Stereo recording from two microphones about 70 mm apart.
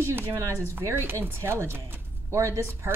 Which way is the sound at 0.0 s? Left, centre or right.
Right.